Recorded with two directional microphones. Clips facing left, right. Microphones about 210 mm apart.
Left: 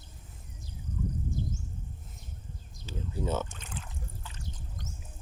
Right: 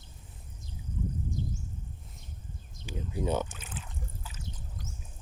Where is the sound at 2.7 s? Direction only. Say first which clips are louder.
Right 1 dB; 15° right (ahead or behind).